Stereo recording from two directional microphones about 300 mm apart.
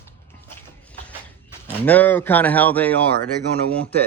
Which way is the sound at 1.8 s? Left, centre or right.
Centre.